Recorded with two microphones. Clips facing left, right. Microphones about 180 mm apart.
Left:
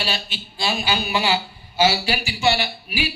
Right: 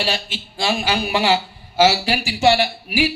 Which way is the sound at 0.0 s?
90° right.